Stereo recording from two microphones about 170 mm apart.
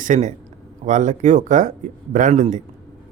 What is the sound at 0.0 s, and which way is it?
Speech, 45° right (ahead or behind).